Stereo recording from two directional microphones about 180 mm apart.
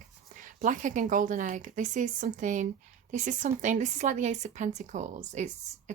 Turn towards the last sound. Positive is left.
turn(degrees=-40)  # may be behind; listen again after turning